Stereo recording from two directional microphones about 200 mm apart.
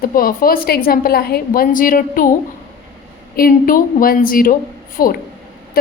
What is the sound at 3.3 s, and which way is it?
A woman's voice, 45° left (ahead or behind).